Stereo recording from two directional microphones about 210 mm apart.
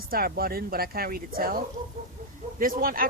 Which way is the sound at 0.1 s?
45° right (ahead or behind).